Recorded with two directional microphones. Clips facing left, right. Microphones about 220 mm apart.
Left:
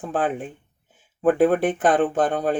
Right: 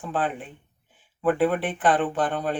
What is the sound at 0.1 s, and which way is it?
Speech, 45° left (ahead or behind).